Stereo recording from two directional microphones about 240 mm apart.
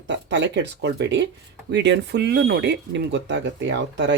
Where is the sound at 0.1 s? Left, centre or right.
Right.